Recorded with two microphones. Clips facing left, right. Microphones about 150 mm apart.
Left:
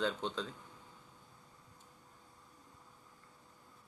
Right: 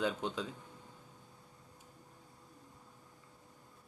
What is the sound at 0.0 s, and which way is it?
Speech, 10° right (ahead or behind).